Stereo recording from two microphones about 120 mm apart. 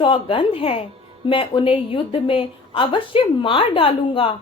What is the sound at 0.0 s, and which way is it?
A woman's voice, 45° left (ahead or behind).